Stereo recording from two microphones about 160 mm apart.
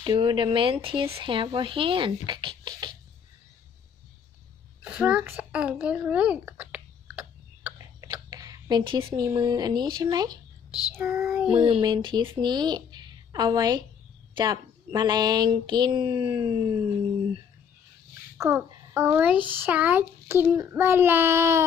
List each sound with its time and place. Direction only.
0.0 s speech: 30° right (ahead or behind)
4.8 s a sound: 10° right (ahead or behind)
8.1 s speech: 25° right (ahead or behind)
10.9 s a child's voice: 15° right (ahead or behind)
11.5 s speech: 30° right (ahead or behind)
18.3 s a child's voice: 15° right (ahead or behind)